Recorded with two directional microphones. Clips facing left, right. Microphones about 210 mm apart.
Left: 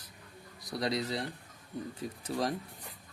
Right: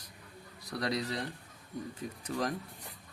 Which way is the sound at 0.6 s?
25° left (ahead or behind).